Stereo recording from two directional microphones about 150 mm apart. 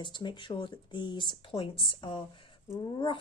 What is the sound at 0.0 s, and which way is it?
Speech, 30° left (ahead or behind).